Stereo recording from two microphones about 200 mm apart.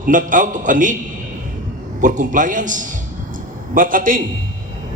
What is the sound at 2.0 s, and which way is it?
A man's voice, 40° right (ahead or behind).